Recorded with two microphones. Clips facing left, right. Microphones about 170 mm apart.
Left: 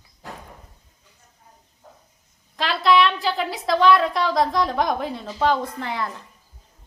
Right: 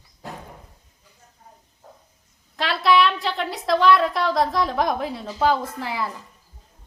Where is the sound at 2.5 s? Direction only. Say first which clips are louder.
Left 1 dB; centre (ahead or behind).